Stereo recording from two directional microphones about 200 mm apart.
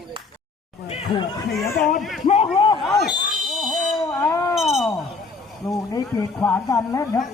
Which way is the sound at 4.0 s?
10° left (ahead or behind).